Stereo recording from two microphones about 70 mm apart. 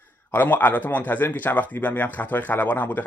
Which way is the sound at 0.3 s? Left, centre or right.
Left.